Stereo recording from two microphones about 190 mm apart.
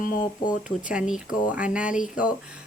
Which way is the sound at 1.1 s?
5° right (ahead or behind).